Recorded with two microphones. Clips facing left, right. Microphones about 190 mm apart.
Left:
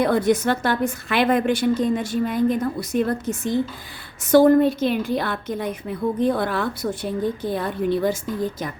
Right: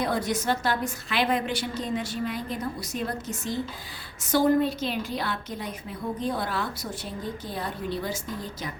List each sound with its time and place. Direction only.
0.0 s a woman's voice: 55° left (ahead or behind)